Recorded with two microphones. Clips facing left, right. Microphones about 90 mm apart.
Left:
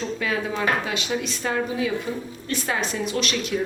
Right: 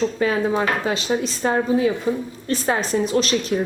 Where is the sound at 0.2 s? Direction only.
35° right (ahead or behind).